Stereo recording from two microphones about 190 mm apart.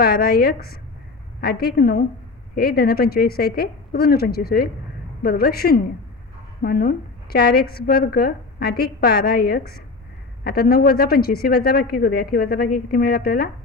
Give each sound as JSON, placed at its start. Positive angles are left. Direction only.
{"t": 0.0, "sound": "a woman's voice", "side_deg": 50}